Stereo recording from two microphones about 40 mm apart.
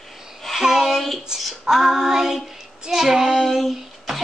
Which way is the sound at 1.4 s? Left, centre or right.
Centre.